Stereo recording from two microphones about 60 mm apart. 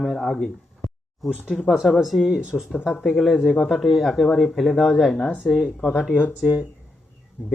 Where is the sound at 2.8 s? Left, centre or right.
Left.